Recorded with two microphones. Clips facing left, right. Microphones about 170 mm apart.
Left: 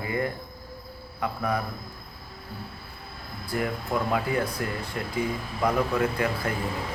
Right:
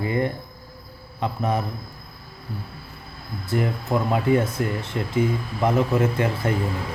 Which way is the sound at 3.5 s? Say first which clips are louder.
Right 4 dB; 20° right (ahead or behind).